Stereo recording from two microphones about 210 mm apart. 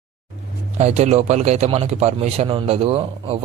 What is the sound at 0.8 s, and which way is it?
A man's voice, 30° right (ahead or behind).